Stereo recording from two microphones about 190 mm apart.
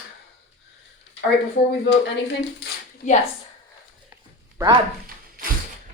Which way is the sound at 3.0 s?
45° left (ahead or behind).